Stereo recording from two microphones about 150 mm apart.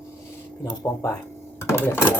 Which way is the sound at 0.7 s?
20° left (ahead or behind).